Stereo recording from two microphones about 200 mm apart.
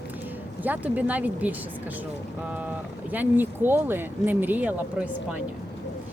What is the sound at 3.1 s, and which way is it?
Speech, 10° right (ahead or behind).